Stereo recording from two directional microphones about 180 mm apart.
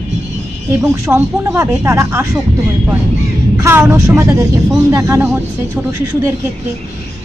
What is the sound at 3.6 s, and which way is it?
A woman's voice, 15° right (ahead or behind).